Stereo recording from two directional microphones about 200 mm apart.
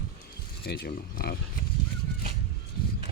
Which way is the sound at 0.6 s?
55° left (ahead or behind).